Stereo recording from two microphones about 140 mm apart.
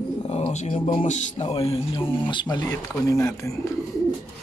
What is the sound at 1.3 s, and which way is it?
Speech, 45° left (ahead or behind).